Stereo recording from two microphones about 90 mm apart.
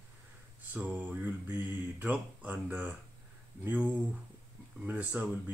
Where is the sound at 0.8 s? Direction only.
20° right (ahead or behind).